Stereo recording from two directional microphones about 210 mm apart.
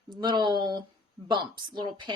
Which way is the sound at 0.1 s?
20° right (ahead or behind).